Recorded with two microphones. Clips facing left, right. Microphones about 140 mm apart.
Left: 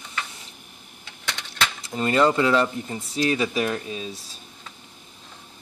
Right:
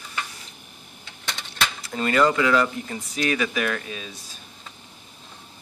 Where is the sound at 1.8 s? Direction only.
20° left (ahead or behind).